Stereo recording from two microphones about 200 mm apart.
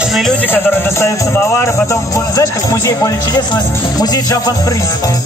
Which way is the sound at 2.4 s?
15° left (ahead or behind).